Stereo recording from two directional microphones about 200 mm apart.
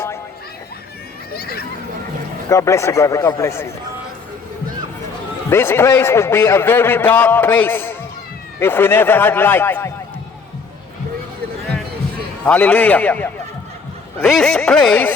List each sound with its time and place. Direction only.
1.3 s speech: 50° left (ahead or behind)
2.5 s a man's voice: 15° left (ahead or behind)
5.5 s a man's voice: 10° left (ahead or behind)
12.5 s a man's voice: 10° left (ahead or behind)
14.2 s a sound: centre (ahead or behind)